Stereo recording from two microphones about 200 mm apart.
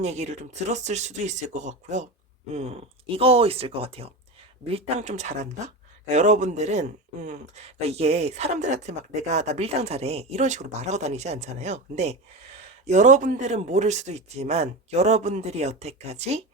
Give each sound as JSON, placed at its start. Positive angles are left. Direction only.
{"t": 0.0, "sound": "speech", "side_deg": -35}
{"t": 3.2, "sound": "speech", "side_deg": -30}